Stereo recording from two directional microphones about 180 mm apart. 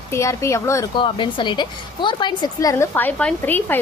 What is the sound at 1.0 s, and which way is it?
A woman's voice, 25° left (ahead or behind).